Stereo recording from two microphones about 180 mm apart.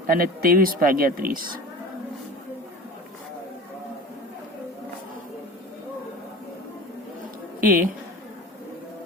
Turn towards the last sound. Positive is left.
turn(degrees=-50)  # may be behind; listen again after turning